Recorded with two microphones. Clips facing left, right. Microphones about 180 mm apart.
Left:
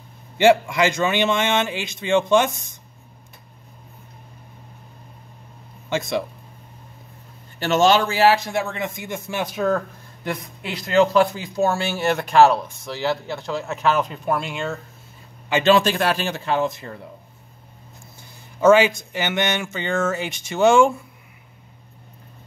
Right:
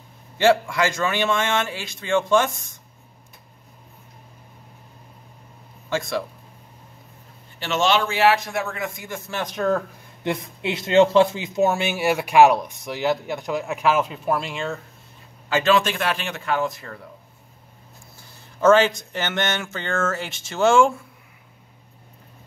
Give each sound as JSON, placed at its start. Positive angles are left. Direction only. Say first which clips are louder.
{"t": 0.4, "sound": "speech", "louder": "left 2 dB", "side_deg": 20}
{"t": 5.9, "sound": "speech", "louder": "left 2 dB", "side_deg": 20}
{"t": 7.5, "sound": "a man's voice", "louder": "left 4 dB", "side_deg": 40}
{"t": 10.6, "sound": "speech", "louder": "right 2 dB", "side_deg": -25}
{"t": 15.5, "sound": "speech", "louder": "left 3 dB", "side_deg": 30}
{"t": 18.6, "sound": "speech", "louder": "left 2 dB", "side_deg": 10}